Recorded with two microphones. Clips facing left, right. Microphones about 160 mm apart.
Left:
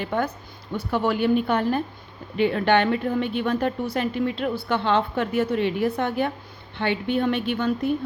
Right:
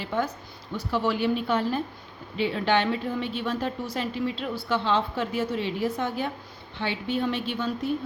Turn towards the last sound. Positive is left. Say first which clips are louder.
# left 5 dB
turn(degrees=60)  # may be behind; listen again after turning